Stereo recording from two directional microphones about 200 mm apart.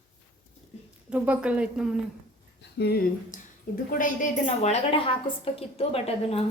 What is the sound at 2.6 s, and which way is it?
Speech, 55° left (ahead or behind).